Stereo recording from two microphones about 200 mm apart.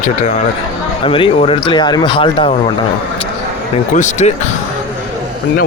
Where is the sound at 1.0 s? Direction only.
25° left (ahead or behind).